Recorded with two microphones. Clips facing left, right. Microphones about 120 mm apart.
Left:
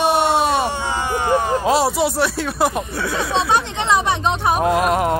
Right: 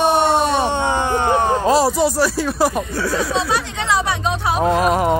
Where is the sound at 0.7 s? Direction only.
20° right (ahead or behind).